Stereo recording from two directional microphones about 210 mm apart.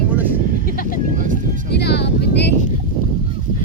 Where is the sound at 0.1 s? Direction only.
10° right (ahead or behind).